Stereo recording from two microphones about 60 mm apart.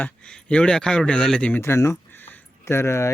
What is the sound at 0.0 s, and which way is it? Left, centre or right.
A man's voice, left.